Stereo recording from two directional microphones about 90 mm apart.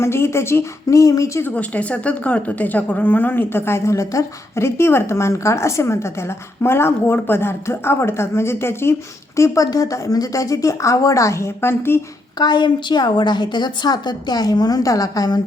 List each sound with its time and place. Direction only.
0.0 s speech: 30° left (ahead or behind)
1.5 s speech: 15° left (ahead or behind)
12.4 s a woman's voice: 55° left (ahead or behind)